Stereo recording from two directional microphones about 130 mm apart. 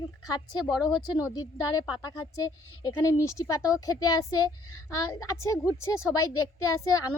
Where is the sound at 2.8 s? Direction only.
25° left (ahead or behind).